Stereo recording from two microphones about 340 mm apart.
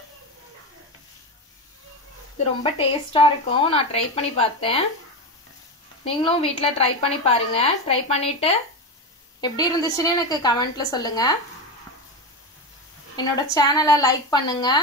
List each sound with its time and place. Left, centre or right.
2.6 s a woman's voice: centre
6.0 s a woman's voice: centre
13.1 s a woman's voice: centre